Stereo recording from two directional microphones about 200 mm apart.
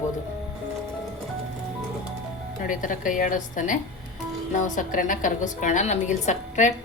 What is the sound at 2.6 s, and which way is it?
A woman's voice, 40° left (ahead or behind).